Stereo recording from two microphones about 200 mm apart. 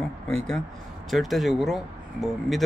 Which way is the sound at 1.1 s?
Centre (ahead or behind).